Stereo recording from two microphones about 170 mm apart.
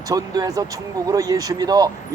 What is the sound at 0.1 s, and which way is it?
Speech, 20° right (ahead or behind).